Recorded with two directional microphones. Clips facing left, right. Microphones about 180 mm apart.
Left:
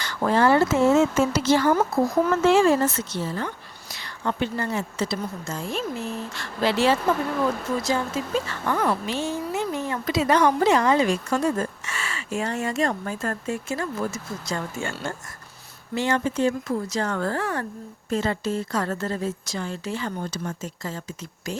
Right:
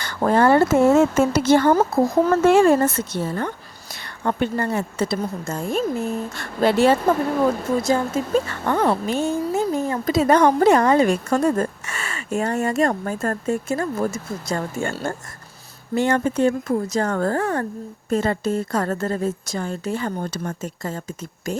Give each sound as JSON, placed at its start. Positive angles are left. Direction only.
{"t": 0.0, "sound": "a woman's voice", "side_deg": -50}